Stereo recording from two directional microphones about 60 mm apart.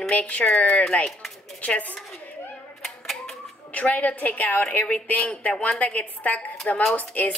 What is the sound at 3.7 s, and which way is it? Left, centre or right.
A woman's voice, left.